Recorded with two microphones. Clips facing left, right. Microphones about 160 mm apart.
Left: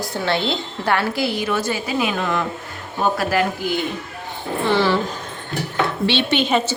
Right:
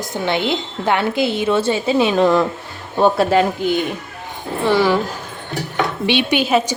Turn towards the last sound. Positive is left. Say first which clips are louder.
# right 2 dB
turn(degrees=-10)  # may be behind; listen again after turning